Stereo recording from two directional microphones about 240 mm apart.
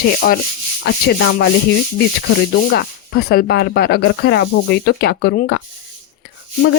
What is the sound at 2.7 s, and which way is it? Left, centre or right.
Speech, left.